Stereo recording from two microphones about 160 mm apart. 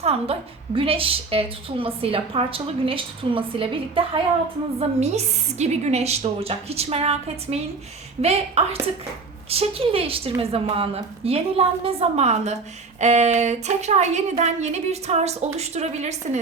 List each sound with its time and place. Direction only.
0.0 s a woman's voice: 40° right (ahead or behind)